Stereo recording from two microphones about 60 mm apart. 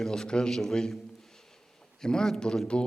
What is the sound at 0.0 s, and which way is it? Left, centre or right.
Speech, centre.